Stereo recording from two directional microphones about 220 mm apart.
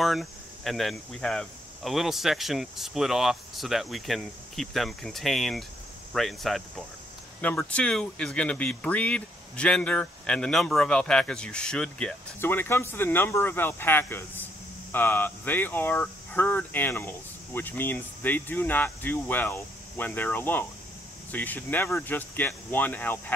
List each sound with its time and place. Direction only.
0.0 s speech: centre (ahead or behind)